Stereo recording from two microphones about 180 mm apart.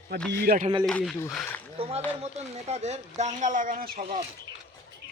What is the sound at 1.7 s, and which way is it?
Speech, 35° right (ahead or behind).